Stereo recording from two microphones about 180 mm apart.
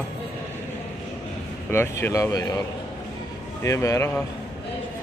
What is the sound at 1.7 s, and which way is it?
Speech, 15° left (ahead or behind).